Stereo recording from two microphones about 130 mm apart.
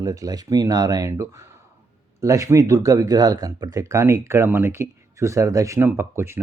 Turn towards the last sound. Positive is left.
turn(degrees=-20)  # may be behind; listen again after turning